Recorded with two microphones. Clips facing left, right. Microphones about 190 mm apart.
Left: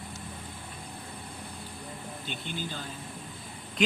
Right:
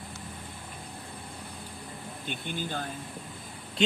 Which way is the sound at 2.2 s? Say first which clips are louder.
Right 3 dB; 50° right (ahead or behind).